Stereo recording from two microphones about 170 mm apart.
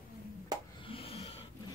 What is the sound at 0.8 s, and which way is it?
Snort, 35° left (ahead or behind).